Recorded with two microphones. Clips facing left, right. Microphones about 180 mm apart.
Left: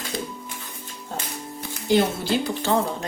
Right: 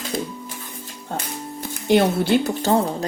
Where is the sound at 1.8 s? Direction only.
55° right (ahead or behind).